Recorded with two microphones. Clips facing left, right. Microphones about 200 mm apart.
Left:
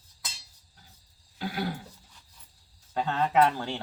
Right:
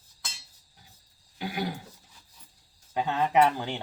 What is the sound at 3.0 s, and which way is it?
Speech, 15° right (ahead or behind).